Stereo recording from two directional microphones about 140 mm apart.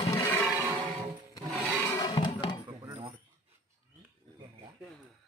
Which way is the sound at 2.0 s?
35° left (ahead or behind).